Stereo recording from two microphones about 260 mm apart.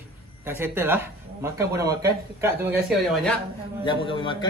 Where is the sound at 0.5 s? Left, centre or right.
Centre.